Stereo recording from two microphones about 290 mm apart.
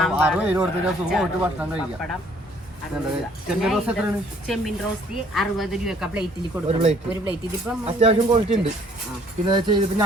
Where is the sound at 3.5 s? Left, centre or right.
Centre.